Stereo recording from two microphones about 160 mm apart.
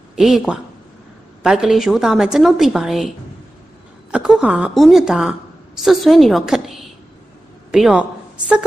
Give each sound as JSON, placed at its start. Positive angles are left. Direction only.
{"t": 0.1, "sound": "a woman's voice", "side_deg": -5}
{"t": 4.1, "sound": "a woman's voice", "side_deg": -5}